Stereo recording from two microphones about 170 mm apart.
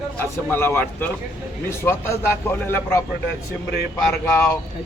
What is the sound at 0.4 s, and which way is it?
A man's voice, 10° left (ahead or behind).